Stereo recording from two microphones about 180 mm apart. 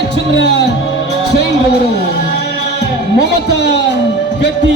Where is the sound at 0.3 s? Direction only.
75° left (ahead or behind).